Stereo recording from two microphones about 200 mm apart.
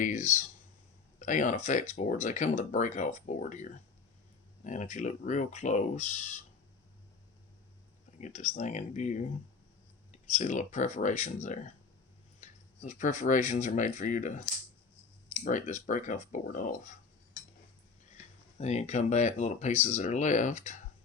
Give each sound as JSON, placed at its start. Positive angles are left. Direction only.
{"t": 0.0, "sound": "speech", "side_deg": 40}
{"t": 8.2, "sound": "speech", "side_deg": 35}
{"t": 15.4, "sound": "speech", "side_deg": 40}
{"t": 18.5, "sound": "speech", "side_deg": 35}